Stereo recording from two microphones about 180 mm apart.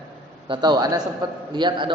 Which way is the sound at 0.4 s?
25° right (ahead or behind).